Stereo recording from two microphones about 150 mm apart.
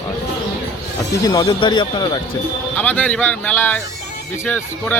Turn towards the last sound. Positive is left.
turn(degrees=10)  # may be behind; listen again after turning